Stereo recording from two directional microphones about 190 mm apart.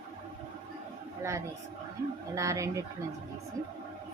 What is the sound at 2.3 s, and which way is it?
Speech, 15° right (ahead or behind).